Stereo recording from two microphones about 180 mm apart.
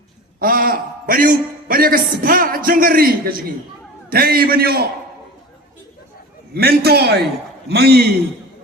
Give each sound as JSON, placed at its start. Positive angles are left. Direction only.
{"t": 0.3, "sound": "a man's voice", "side_deg": -50}
{"t": 6.5, "sound": "a man's voice", "side_deg": -60}